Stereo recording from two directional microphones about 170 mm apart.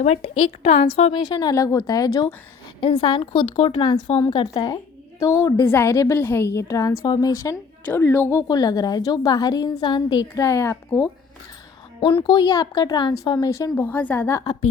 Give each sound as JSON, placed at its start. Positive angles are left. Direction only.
{"t": 0.6, "sound": "speech", "side_deg": 40}
{"t": 1.3, "sound": "a woman's voice", "side_deg": 25}
{"t": 11.9, "sound": "a woman's voice", "side_deg": 30}